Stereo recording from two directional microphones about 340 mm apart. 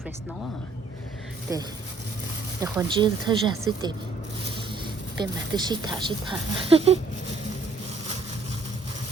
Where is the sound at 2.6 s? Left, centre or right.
Centre.